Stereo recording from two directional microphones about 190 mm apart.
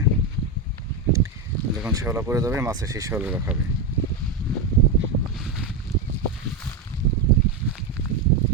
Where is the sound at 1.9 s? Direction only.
15° right (ahead or behind).